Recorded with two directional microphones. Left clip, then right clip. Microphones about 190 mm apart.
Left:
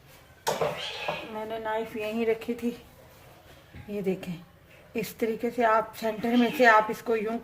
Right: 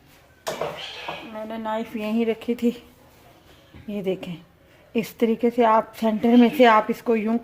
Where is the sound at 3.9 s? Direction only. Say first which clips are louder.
Right 4 dB; 35° right (ahead or behind).